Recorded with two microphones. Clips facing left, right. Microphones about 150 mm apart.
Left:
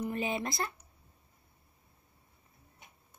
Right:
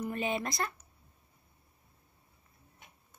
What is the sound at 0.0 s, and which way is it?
Speech, 25° left (ahead or behind).